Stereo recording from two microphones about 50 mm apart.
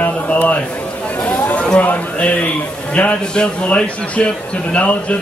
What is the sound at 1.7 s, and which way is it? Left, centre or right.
Speech, left.